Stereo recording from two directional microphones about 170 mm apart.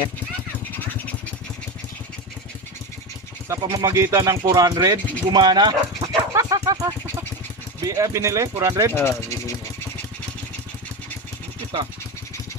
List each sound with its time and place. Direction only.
3.4 s speech: 15° right (ahead or behind)
8.9 s speech: 15° left (ahead or behind)